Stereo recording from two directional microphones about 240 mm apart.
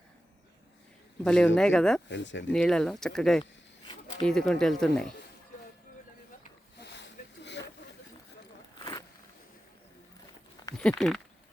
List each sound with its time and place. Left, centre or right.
1.2 s speech: centre
2.0 s speech: left
2.5 s speech: centre
6.7 s sniff: left
8.8 s a sound: centre
10.8 s speech: centre